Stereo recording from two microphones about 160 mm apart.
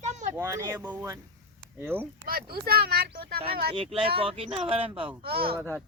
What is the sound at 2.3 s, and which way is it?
Speech, 70° right (ahead or behind).